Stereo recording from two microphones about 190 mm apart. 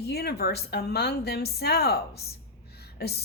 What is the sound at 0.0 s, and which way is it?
Speech, 55° left (ahead or behind).